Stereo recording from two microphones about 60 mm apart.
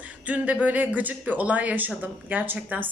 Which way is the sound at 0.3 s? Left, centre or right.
Right.